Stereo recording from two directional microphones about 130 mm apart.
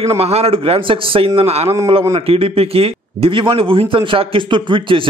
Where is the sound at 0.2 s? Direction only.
50° right (ahead or behind).